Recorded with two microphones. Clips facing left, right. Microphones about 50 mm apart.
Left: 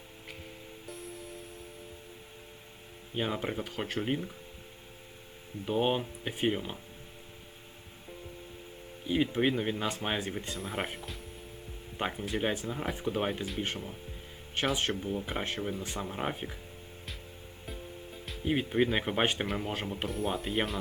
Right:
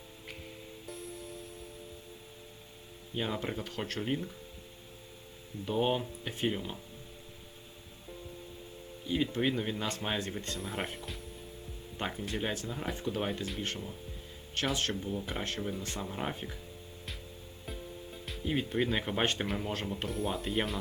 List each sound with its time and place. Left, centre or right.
0.9 s music: centre
3.2 s speech: centre
5.6 s speech: centre
9.0 s speech: centre
11.9 s speech: centre
17.7 s music: centre
18.4 s speech: centre
20.1 s speech: centre